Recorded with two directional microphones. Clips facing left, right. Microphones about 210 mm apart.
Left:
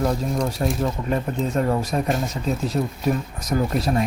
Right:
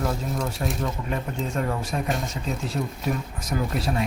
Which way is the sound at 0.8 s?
40° left (ahead or behind).